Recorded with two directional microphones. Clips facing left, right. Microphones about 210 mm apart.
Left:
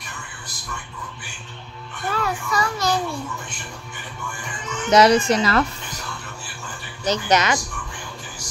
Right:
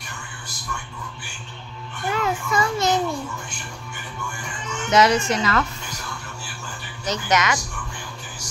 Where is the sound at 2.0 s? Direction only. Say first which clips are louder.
Right 1 dB; 20° right (ahead or behind).